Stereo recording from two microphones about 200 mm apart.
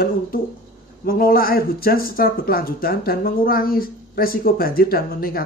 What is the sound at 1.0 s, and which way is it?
Speech, 45° left (ahead or behind).